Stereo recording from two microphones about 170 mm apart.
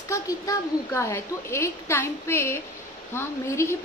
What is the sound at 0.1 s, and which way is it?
A woman's voice, 20° left (ahead or behind).